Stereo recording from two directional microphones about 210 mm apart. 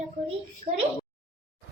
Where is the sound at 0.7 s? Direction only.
25° right (ahead or behind).